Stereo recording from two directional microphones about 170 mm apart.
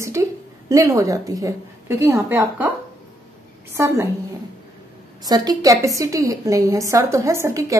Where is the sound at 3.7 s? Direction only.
15° right (ahead or behind).